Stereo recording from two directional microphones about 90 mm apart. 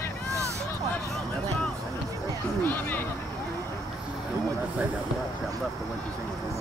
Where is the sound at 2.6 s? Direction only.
20° left (ahead or behind).